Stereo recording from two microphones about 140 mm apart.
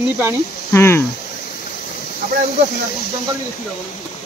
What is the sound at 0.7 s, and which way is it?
Speech, 20° left (ahead or behind).